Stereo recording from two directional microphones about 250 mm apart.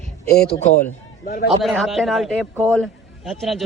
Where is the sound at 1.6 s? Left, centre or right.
Centre.